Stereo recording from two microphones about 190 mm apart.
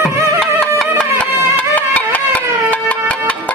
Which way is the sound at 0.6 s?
5° left (ahead or behind).